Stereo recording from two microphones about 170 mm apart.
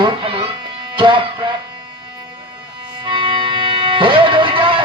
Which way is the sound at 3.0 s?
30° right (ahead or behind).